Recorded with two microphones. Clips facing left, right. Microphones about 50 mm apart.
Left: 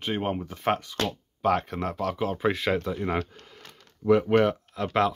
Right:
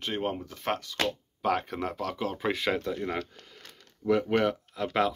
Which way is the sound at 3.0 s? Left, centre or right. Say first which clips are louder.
Left 4 dB; centre.